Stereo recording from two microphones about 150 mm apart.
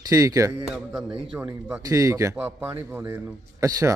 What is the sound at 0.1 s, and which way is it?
Speech, 20° right (ahead or behind).